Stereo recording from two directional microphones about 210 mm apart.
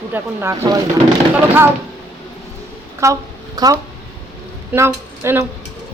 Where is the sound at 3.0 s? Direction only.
15° right (ahead or behind).